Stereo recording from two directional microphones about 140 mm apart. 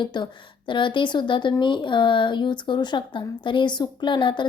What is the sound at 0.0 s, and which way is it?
Speech, 35° left (ahead or behind).